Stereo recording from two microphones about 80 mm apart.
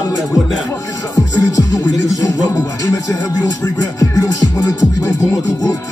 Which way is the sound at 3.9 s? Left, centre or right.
Left.